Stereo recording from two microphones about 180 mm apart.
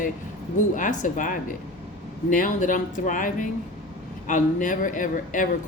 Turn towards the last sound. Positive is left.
turn(degrees=45)  # may be behind; listen again after turning